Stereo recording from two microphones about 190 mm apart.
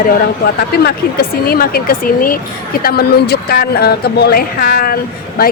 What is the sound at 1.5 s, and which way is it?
Speech, 50° left (ahead or behind).